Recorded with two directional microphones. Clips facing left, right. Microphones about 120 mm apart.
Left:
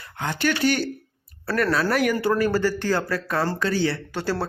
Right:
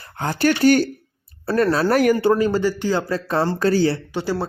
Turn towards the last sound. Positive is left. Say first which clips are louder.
# right 3 dB
turn(degrees=-15)  # may be behind; listen again after turning